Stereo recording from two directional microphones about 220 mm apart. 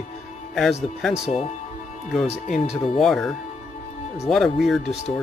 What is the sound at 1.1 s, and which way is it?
Speech, 30° left (ahead or behind).